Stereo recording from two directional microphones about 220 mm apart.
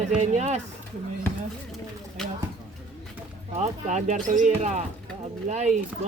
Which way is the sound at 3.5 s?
30° right (ahead or behind).